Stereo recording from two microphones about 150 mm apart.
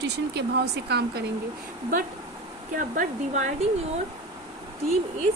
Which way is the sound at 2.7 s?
65° right (ahead or behind).